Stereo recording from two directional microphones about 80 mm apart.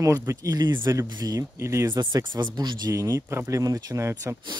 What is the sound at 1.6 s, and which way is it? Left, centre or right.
Speech, right.